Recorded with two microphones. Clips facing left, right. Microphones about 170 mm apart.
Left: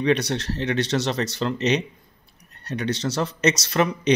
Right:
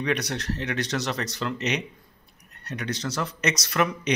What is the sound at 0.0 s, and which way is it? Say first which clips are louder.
Speech: left 6 dB; 30° left (ahead or behind).